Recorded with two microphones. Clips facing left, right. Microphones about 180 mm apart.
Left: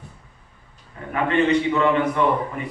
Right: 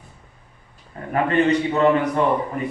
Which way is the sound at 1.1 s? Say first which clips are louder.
Right 1 dB; 40° right (ahead or behind).